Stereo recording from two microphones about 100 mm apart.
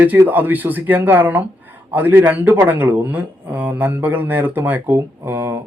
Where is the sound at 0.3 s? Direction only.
20° right (ahead or behind).